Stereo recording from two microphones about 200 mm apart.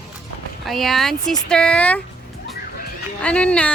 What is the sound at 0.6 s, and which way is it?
Speech, centre (ahead or behind).